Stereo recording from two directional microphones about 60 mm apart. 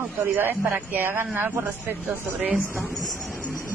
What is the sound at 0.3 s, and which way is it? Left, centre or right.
Speech, right.